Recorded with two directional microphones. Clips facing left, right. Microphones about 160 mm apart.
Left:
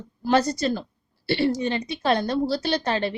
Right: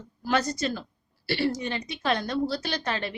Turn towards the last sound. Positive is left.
turn(degrees=30)  # may be behind; listen again after turning